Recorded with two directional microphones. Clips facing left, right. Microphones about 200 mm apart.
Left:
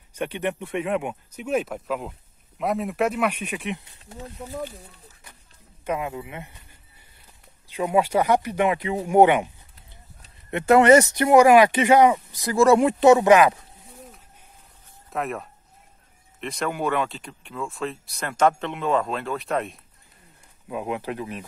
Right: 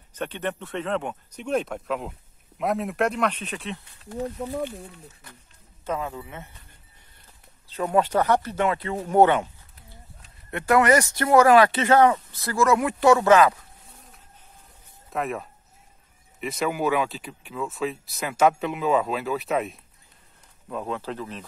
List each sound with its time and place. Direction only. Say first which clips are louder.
0.1 s speech: left 3 dB; 10° left (ahead or behind)
5.9 s speech: left 2 dB; 15° left (ahead or behind)
7.7 s speech: left 1 dB; 10° left (ahead or behind)
12.5 s speech: left 5 dB; 30° left (ahead or behind)
15.0 s speech: even; centre (ahead or behind)
20.6 s speech: left 2 dB; 15° left (ahead or behind)